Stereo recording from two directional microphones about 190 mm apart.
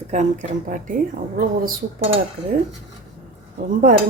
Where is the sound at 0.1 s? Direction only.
40° right (ahead or behind).